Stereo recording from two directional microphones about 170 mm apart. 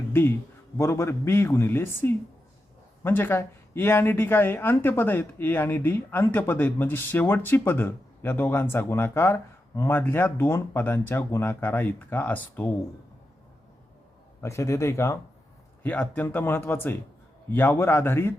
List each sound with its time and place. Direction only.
0.1 s a man's voice: 15° left (ahead or behind)
14.4 s speech: 15° left (ahead or behind)